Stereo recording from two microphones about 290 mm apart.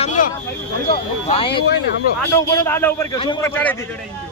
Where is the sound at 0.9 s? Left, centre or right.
Centre.